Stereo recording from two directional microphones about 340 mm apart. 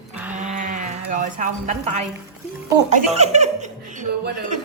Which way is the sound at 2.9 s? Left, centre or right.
Centre.